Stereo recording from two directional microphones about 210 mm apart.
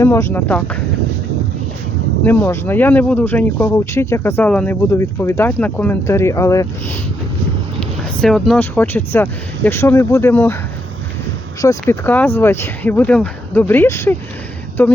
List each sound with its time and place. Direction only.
0.0 s speech: 10° left (ahead or behind)
2.2 s speech: 10° left (ahead or behind)
7.8 s speech: centre (ahead or behind)
11.6 s speech: 15° left (ahead or behind)